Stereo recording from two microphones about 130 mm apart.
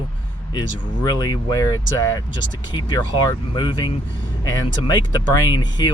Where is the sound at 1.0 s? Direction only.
30° left (ahead or behind).